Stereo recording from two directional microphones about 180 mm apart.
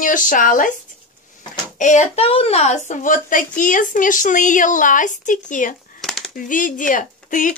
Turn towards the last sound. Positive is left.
turn(degrees=45)  # may be behind; listen again after turning